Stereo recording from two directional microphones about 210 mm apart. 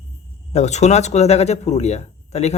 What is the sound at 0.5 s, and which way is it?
Speech, 30° left (ahead or behind).